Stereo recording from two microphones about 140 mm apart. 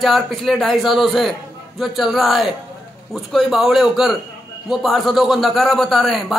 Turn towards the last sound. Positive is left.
turn(degrees=0)  # may be behind; listen again after turning